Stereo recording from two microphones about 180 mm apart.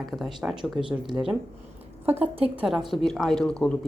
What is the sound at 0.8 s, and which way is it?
Speech, 25° right (ahead or behind).